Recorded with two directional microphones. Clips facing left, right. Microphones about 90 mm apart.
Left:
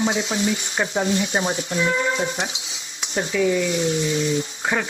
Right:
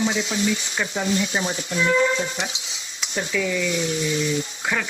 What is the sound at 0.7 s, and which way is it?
Speech, 35° left (ahead or behind).